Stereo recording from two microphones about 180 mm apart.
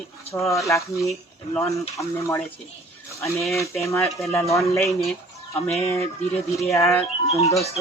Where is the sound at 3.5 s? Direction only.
15° left (ahead or behind).